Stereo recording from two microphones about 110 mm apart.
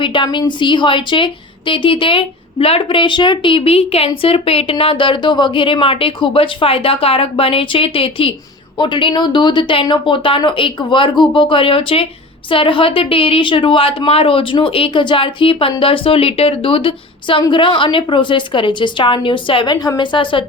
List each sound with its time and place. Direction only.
0.0 s a woman's voice: 50° left (ahead or behind)